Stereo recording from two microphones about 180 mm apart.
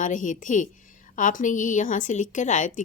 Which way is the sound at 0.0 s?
45° left (ahead or behind).